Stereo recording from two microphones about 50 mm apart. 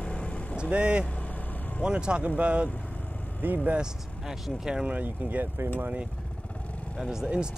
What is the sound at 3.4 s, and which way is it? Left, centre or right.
Speech, right.